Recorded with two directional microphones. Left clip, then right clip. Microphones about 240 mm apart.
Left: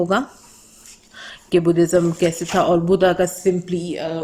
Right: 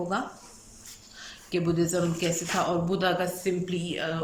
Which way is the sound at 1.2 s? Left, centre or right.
Left.